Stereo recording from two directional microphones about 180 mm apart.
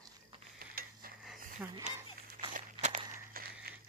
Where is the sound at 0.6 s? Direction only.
55° right (ahead or behind).